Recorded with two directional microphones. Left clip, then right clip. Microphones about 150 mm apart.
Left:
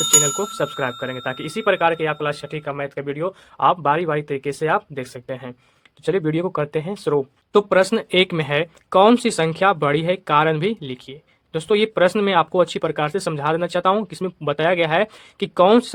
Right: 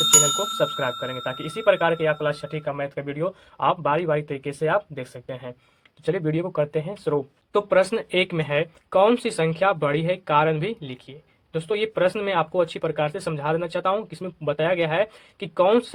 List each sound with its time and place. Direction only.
0.0 s bicycle bell: centre (ahead or behind)
0.8 s speech: 45° left (ahead or behind)